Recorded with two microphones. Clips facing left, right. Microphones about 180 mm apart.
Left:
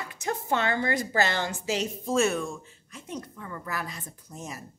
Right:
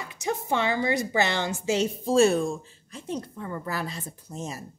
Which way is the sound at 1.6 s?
30° right (ahead or behind).